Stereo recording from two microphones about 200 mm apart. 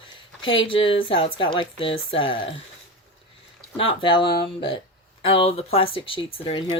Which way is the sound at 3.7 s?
25° left (ahead or behind).